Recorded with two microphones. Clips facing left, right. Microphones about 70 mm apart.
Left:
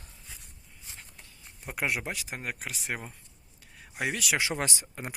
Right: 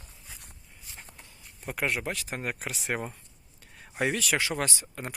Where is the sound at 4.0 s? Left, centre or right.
Centre; by 5.0 s left.